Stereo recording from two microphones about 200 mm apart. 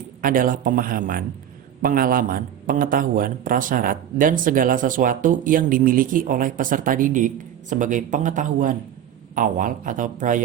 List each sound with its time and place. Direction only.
0.2 s a man's voice: 45° right (ahead or behind)